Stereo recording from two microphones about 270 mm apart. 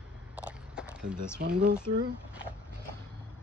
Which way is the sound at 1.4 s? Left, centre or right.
Right.